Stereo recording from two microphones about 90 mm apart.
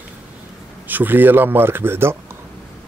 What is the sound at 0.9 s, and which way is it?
Speech, 20° right (ahead or behind).